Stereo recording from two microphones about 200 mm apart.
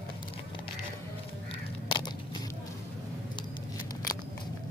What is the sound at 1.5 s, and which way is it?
Crow, 25° left (ahead or behind).